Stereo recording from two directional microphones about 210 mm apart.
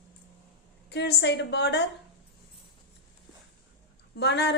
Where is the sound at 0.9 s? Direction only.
50° left (ahead or behind).